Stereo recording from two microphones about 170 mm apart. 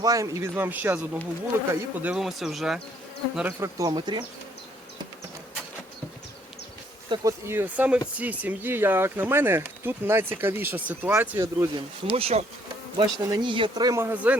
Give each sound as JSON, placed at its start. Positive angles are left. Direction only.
{"t": 0.0, "sound": "speech", "side_deg": -20}
{"t": 3.3, "sound": "speech", "side_deg": -10}
{"t": 7.1, "sound": "speech", "side_deg": -15}
{"t": 12.1, "sound": "bee", "side_deg": -35}
{"t": 13.0, "sound": "speech", "side_deg": -25}